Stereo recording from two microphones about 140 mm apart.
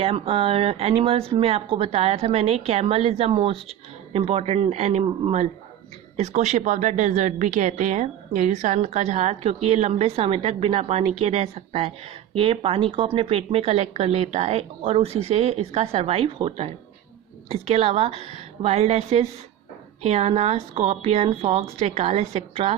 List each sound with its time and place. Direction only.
0.0 s a woman's voice: 40° right (ahead or behind)